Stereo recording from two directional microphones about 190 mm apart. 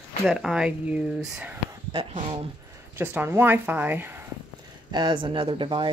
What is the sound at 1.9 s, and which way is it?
Speech, 25° right (ahead or behind).